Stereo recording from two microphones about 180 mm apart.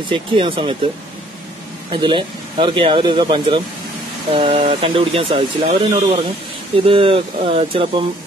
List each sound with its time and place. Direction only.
0.1 s speech: 30° right (ahead or behind)
1.9 s speech: 25° right (ahead or behind)